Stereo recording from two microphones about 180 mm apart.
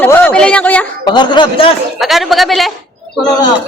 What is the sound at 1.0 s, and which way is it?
Speech, 25° left (ahead or behind).